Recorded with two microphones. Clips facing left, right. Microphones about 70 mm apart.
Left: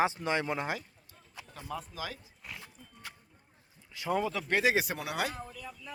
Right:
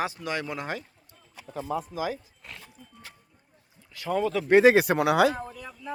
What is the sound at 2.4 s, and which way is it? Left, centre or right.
Music, centre.